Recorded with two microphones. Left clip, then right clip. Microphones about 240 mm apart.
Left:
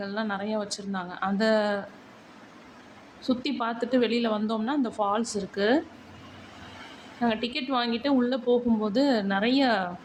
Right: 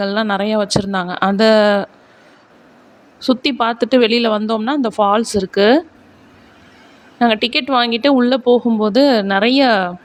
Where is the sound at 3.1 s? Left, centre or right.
Right.